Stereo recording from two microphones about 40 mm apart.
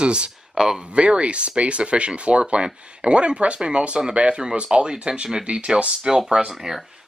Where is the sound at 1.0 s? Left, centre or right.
Right.